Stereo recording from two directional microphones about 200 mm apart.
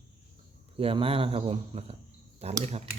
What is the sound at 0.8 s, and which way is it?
Speech, 30° right (ahead or behind).